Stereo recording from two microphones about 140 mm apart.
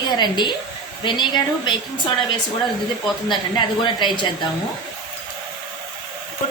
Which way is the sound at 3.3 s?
35° left (ahead or behind).